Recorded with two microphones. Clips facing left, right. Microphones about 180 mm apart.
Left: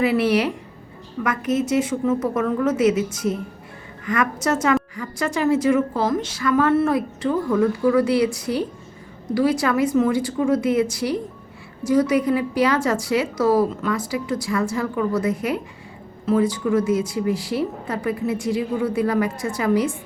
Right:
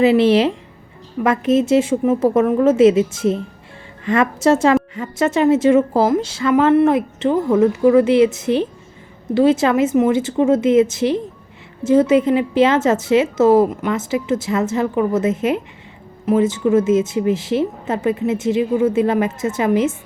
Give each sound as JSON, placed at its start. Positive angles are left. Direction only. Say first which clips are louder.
{"t": 0.0, "sound": "a woman's voice", "louder": "right 6 dB", "side_deg": -25}